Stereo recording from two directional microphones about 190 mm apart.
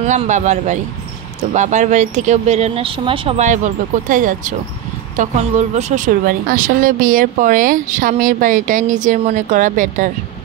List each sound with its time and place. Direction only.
0.0 s speech: 40° right (ahead or behind)